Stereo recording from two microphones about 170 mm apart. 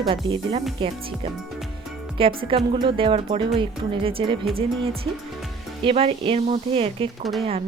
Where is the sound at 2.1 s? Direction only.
30° right (ahead or behind).